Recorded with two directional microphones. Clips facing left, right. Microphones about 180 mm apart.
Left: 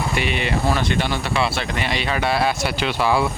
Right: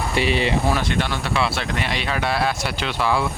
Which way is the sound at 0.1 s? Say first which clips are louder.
Right 3 dB; 30° right (ahead or behind).